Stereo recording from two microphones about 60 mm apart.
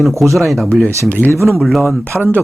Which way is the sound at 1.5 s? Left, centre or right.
Centre.